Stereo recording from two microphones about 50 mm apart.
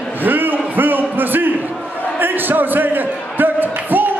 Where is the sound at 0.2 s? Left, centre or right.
Right.